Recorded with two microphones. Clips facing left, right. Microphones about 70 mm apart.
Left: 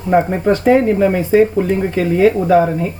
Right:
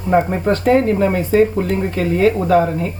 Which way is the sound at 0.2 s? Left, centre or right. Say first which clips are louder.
Left 2 dB; centre.